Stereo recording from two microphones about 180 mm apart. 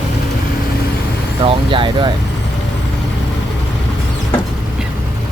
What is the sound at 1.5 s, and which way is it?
Vehicle, 25° right (ahead or behind).